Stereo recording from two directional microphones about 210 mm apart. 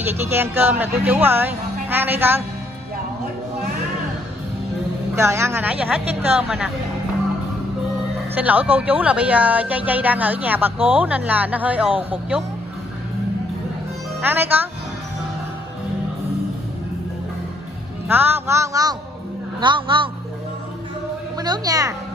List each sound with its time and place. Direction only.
0.0 s speech: 10° right (ahead or behind)
5.1 s speech: 10° right (ahead or behind)
8.4 s speech: 10° right (ahead or behind)
14.2 s speech: 10° right (ahead or behind)
18.0 s speech: 10° right (ahead or behind)
21.4 s speech: 20° right (ahead or behind)